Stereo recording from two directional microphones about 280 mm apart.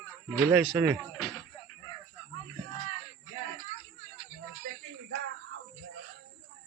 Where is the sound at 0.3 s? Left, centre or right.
Centre.